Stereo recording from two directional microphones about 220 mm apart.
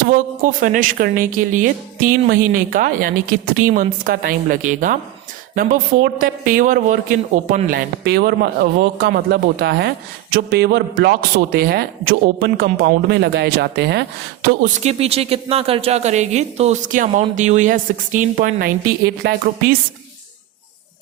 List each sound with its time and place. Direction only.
0.1 s a woman's voice: 35° right (ahead or behind)
14.8 s a woman's voice: 25° right (ahead or behind); by 19.7 s 45° right (ahead or behind)